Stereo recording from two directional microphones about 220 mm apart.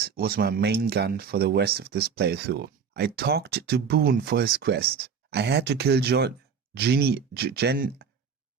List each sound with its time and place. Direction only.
0.0 s speech: 45° right (ahead or behind)